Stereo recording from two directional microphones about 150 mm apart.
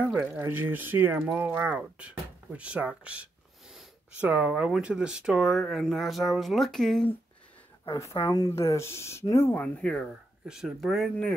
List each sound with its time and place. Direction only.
0.0 s speech: 10° right (ahead or behind); by 7.2 s 5° left (ahead or behind)
7.8 s speech: 25° left (ahead or behind); by 10.0 s 10° left (ahead or behind)
10.4 s speech: 5° right (ahead or behind)